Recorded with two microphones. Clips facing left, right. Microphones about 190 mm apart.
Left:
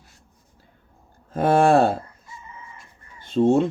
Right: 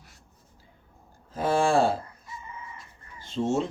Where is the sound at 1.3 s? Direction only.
60° left (ahead or behind).